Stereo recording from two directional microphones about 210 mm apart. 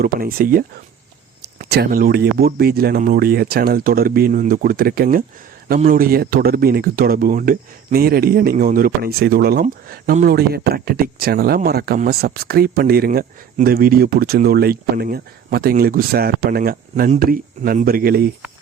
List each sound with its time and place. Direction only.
0.0 s speech: 45° right (ahead or behind)